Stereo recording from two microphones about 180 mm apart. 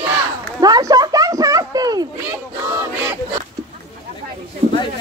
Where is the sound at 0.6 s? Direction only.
20° right (ahead or behind).